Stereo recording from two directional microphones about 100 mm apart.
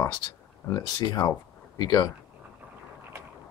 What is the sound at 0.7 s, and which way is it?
Speech, 40° left (ahead or behind).